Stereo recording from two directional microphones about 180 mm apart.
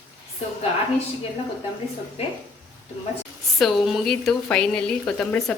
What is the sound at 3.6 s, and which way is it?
Speech, centre (ahead or behind).